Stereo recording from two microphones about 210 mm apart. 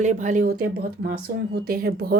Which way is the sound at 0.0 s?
35° right (ahead or behind).